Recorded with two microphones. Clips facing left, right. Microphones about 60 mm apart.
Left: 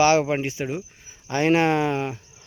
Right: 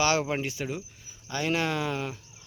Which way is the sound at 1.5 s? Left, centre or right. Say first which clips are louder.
Left 8 dB; left.